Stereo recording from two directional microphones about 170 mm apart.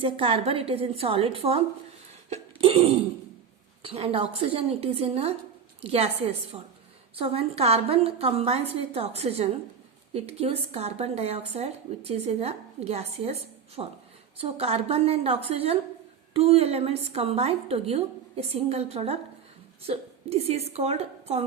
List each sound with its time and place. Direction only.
0.0 s speech: 30° right (ahead or behind)
2.3 s a sound: 35° right (ahead or behind)
3.8 s a woman's voice: 35° right (ahead or behind)